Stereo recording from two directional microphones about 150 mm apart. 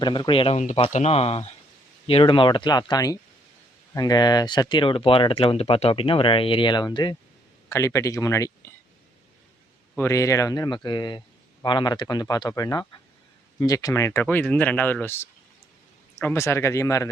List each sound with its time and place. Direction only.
0.0 s speech: 30° left (ahead or behind)
0.6 s speech: 50° left (ahead or behind); by 8.7 s 20° left (ahead or behind)
10.0 s speech: 20° left (ahead or behind)